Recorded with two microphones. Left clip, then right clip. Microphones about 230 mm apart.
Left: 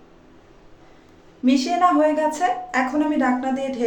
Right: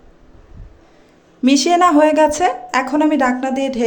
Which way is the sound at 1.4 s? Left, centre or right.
Right.